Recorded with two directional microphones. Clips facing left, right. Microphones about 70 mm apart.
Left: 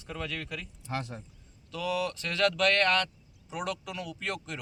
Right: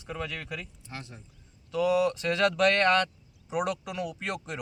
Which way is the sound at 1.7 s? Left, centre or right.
Centre.